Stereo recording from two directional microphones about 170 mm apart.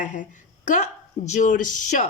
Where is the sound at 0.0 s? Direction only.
50° left (ahead or behind).